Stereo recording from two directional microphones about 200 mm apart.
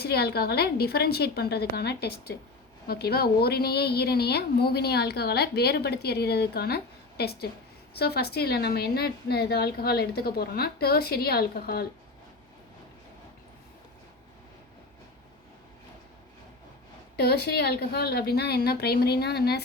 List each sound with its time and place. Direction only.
0.0 s a woman's voice: 55° left (ahead or behind)
17.2 s a woman's voice: 50° left (ahead or behind)